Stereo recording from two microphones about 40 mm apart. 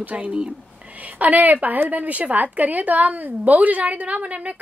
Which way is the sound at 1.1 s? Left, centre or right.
Right.